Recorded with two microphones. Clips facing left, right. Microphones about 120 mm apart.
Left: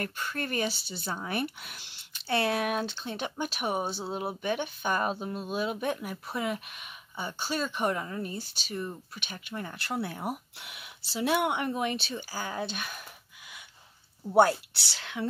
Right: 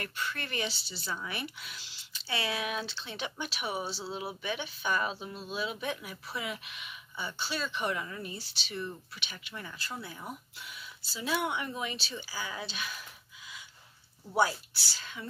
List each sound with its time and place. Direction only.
0.0 s speech: 45° left (ahead or behind)
9.8 s speech: 70° left (ahead or behind); by 13.0 s 50° left (ahead or behind)
14.3 s speech: 60° left (ahead or behind)